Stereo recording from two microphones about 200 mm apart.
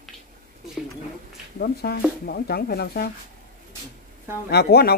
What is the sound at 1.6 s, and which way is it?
Speech, 50° left (ahead or behind).